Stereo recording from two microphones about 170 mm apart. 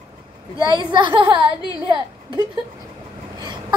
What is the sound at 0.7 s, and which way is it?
A woman's voice, 25° right (ahead or behind).